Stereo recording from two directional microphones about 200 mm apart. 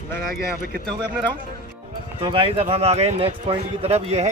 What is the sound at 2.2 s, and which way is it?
Speech, 25° right (ahead or behind).